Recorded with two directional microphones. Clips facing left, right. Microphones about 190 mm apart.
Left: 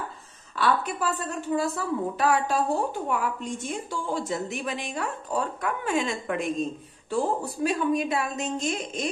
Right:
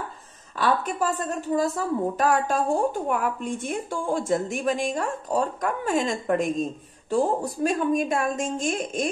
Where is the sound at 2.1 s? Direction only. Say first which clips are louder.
Left 1 dB; 45° right (ahead or behind).